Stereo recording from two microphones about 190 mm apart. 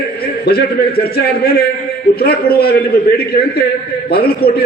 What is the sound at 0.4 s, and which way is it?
A man's voice, 55° left (ahead or behind).